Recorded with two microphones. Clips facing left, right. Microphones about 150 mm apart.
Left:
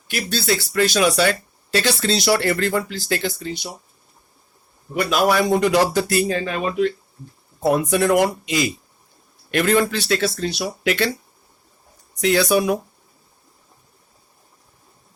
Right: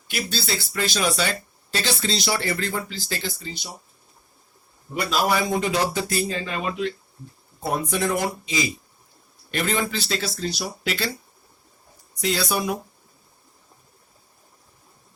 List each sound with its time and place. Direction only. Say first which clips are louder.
0.1 s speech: left 6 dB; 60° left (ahead or behind)
4.9 s speech: left 5 dB; 70° left (ahead or behind); by 6.9 s 55° left (ahead or behind)
7.6 s a man's voice: left 7 dB; 75° left (ahead or behind)
12.2 s speech: left 7 dB; 70° left (ahead or behind)